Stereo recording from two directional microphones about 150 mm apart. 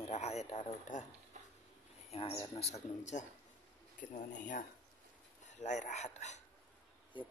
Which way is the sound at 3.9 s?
60° left (ahead or behind).